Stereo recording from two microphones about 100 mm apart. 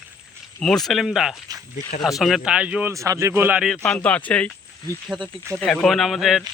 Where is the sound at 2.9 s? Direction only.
30° right (ahead or behind).